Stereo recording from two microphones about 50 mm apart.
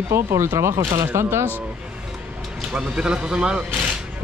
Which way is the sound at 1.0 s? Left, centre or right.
Right.